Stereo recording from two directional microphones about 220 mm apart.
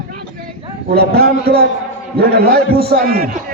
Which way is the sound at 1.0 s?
45° right (ahead or behind).